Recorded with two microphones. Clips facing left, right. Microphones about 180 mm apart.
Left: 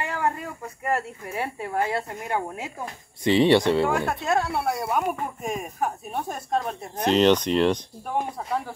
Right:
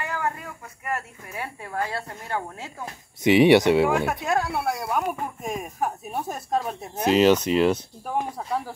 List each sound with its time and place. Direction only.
0.0 s speech: 30° left (ahead or behind); by 2.7 s 10° left (ahead or behind)
3.3 s speech: 10° right (ahead or behind)